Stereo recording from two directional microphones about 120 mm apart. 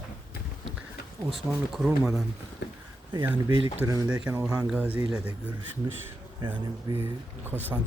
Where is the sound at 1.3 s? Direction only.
Centre (ahead or behind).